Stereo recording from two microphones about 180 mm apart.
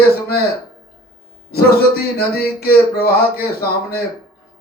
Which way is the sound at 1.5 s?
60° left (ahead or behind).